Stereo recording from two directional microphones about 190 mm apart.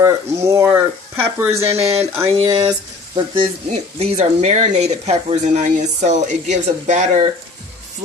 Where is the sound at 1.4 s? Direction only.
15° right (ahead or behind).